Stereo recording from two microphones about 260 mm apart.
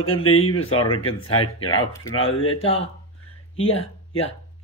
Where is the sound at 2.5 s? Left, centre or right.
Left.